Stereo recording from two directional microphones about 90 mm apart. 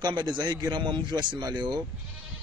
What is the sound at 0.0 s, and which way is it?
Speech, 55° right (ahead or behind).